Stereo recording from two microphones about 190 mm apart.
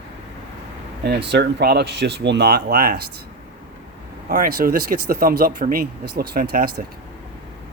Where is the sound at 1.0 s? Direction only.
60° right (ahead or behind).